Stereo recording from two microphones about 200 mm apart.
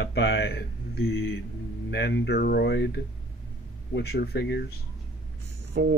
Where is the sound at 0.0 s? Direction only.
60° left (ahead or behind).